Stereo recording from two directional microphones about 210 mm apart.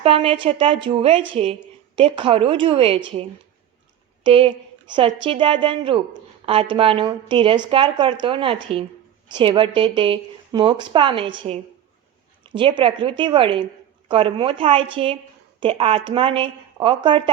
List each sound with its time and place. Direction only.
0.0 s a woman's voice: 25° right (ahead or behind)
4.2 s a woman's voice: 25° right (ahead or behind)